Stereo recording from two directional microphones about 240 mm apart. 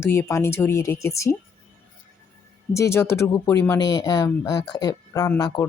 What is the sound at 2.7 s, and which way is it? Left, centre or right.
Speech, centre.